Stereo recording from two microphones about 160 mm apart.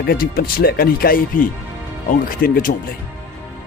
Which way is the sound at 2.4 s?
60° left (ahead or behind).